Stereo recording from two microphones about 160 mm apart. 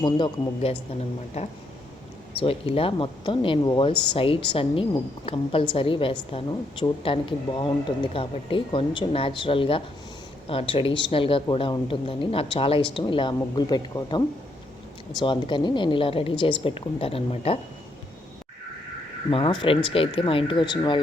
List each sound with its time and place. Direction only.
0.0 s speech: 30° left (ahead or behind)
2.4 s speech: 35° left (ahead or behind)
19.3 s speech: 35° left (ahead or behind)